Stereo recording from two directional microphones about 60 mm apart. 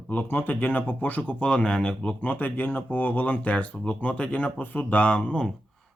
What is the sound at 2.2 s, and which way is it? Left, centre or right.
Speech, left.